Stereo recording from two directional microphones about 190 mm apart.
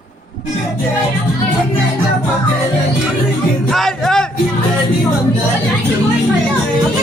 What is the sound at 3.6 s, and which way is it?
Speech, centre (ahead or behind).